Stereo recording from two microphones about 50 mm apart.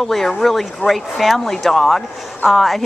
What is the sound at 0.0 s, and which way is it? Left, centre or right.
A woman's voice, centre.